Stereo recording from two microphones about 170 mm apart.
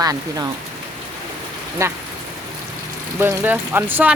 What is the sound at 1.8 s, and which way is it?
Speech, 15° right (ahead or behind).